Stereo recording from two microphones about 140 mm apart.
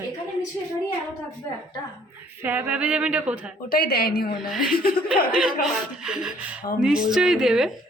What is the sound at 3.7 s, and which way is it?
A woman's voice, 90° left.